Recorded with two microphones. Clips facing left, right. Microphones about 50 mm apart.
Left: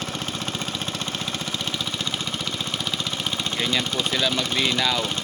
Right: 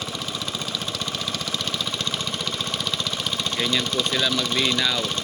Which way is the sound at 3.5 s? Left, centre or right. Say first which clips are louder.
Right 1 dB; centre.